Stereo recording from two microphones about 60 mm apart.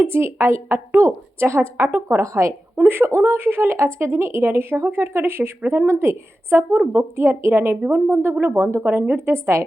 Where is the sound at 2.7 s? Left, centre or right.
Right.